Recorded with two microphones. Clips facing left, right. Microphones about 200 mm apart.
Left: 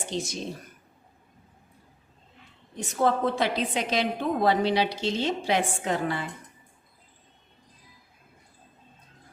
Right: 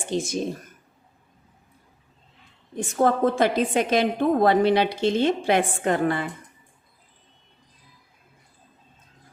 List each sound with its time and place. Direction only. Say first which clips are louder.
0.0 s speech: right 6 dB; 50° right (ahead or behind)
2.7 s a woman's voice: right 3 dB; 50° right (ahead or behind)